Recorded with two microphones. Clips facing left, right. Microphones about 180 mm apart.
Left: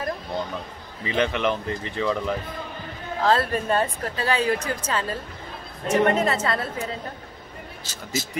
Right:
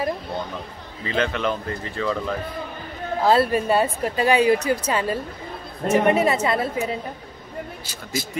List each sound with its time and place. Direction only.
1.0 s speech: 15° left (ahead or behind)
3.2 s a woman's voice: 10° right (ahead or behind)